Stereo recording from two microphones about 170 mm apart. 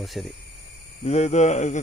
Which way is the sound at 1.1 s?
40° left (ahead or behind).